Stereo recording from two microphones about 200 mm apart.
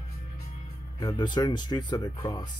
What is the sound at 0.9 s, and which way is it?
Speech, 20° left (ahead or behind).